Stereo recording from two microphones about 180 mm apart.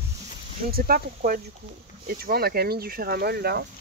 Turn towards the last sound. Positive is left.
turn(degrees=-60)  # may be behind; listen again after turning